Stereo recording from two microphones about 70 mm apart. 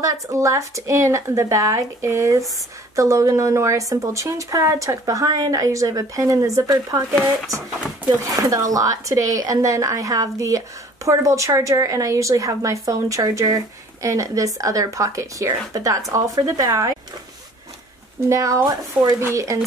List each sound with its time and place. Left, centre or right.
0.0 s a woman's voice: right
8.4 s a woman's voice: right
18.3 s a woman's voice: right